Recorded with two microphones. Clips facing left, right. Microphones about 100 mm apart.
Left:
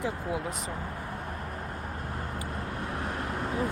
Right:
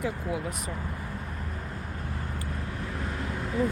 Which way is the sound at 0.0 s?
25° left (ahead or behind).